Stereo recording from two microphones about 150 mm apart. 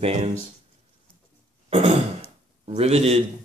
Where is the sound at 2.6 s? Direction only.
45° right (ahead or behind).